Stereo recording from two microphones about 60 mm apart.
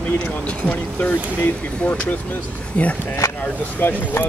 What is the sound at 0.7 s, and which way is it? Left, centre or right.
Speech, left.